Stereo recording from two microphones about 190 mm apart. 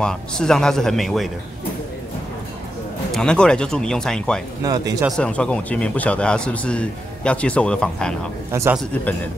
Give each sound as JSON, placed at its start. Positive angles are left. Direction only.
{"t": 0.0, "sound": "a man's voice", "side_deg": 5}
{"t": 3.1, "sound": "a man's voice", "side_deg": 5}
{"t": 4.6, "sound": "speech", "side_deg": -20}
{"t": 5.0, "sound": "a man's voice", "side_deg": 5}
{"t": 8.5, "sound": "speech", "side_deg": -15}